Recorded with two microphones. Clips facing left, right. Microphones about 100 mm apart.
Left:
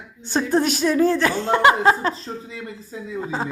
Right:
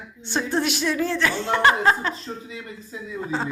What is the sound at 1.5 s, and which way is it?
Speech, 20° left (ahead or behind).